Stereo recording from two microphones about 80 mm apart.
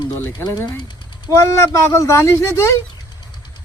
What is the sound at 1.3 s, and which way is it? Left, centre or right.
Speech, left.